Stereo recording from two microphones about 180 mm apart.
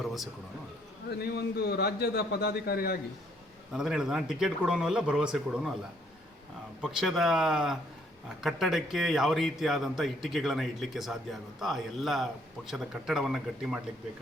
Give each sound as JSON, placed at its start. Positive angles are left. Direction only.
{"t": 0.0, "sound": "a man's voice", "side_deg": 0}
{"t": 1.1, "sound": "a man's voice", "side_deg": 65}
{"t": 3.7, "sound": "a man's voice", "side_deg": -5}
{"t": 6.8, "sound": "a man's voice", "side_deg": 0}